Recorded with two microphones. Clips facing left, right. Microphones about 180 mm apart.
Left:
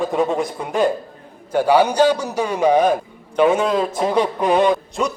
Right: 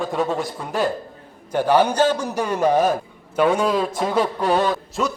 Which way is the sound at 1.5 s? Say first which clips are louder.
Left 2 dB; 10° left (ahead or behind).